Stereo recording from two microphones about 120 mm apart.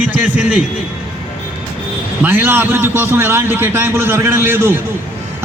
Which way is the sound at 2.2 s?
20° right (ahead or behind).